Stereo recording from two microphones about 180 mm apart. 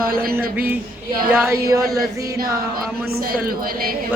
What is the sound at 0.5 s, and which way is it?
A woman's voice, 10° right (ahead or behind).